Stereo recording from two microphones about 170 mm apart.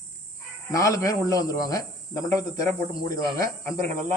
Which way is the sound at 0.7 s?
20° left (ahead or behind).